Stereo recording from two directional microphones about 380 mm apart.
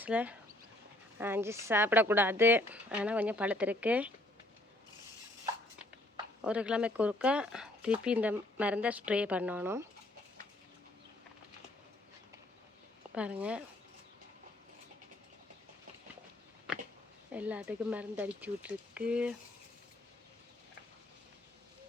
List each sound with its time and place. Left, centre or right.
0.0 s a woman's voice: centre
6.4 s a woman's voice: centre
13.1 s a woman's voice: centre
17.3 s a woman's voice: centre